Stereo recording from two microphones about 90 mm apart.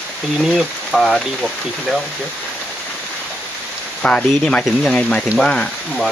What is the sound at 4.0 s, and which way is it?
Speech, 5° left (ahead or behind).